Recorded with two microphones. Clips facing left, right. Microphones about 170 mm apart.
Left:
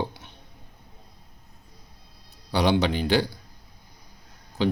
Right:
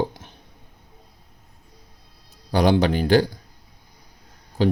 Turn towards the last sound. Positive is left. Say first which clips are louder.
# right 4 dB
turn(degrees=-45)  # may be behind; listen again after turning